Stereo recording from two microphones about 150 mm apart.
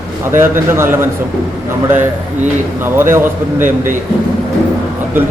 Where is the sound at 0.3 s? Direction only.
15° right (ahead or behind).